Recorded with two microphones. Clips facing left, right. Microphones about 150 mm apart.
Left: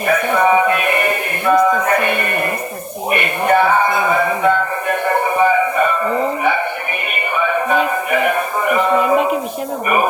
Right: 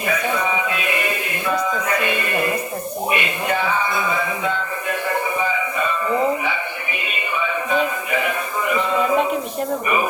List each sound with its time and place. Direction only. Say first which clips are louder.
0.1 s music: left 9 dB; 55° left (ahead or behind)
3.1 s speech: left 8 dB; 55° left (ahead or behind)
7.1 s music: left 6 dB; 55° left (ahead or behind)
9.8 s speech: left 7 dB; 55° left (ahead or behind)